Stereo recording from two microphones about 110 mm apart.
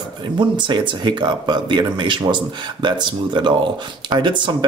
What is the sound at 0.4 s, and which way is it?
Speech, 45° right (ahead or behind).